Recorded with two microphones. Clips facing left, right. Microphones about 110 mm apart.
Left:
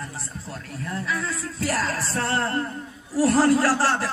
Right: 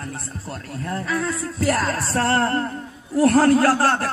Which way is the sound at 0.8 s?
55° right (ahead or behind).